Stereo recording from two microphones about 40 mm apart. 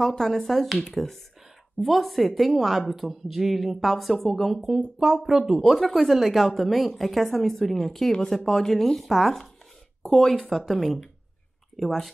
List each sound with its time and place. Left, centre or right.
0.1 s a woman's voice: centre
4.9 s speech: centre
5.6 s a woman's voice: centre
10.5 s a woman's voice: centre